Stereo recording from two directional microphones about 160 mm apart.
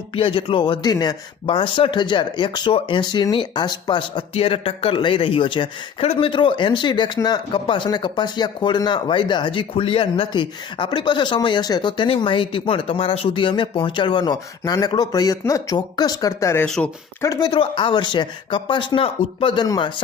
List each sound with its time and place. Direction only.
0.1 s speech: 35° left (ahead or behind); by 16.6 s 15° left (ahead or behind)
16.6 s speech: 5° left (ahead or behind)
17.2 s speech: 25° left (ahead or behind)